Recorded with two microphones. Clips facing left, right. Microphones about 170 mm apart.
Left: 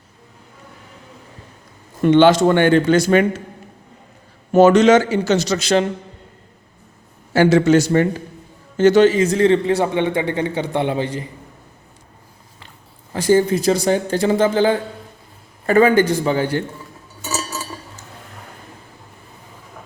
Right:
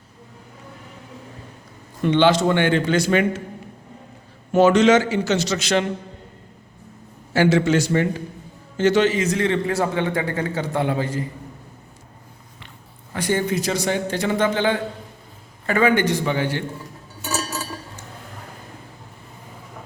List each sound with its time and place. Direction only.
2.0 s a man's voice: 45° left (ahead or behind)
4.5 s a man's voice: 40° left (ahead or behind)
7.3 s a man's voice: 40° left (ahead or behind); by 11.3 s 20° left (ahead or behind)
13.2 s a man's voice: 30° left (ahead or behind)